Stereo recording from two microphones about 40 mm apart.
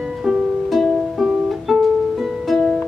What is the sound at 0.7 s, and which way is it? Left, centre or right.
Music, centre.